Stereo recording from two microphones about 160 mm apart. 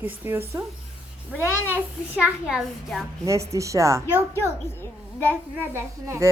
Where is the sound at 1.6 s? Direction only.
10° right (ahead or behind).